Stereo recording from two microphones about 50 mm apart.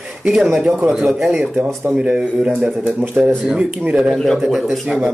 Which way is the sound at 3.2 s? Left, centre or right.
Right.